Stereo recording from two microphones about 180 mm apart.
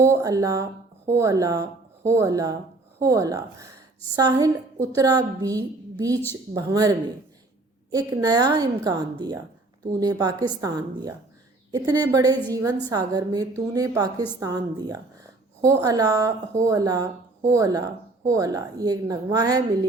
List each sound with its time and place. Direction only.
0.0 s a woman's voice: 15° right (ahead or behind)